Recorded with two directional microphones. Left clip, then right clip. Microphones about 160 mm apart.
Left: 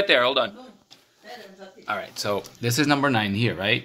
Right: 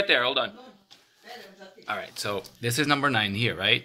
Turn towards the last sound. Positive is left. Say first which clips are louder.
# even
turn(degrees=-10)  # may be behind; listen again after turning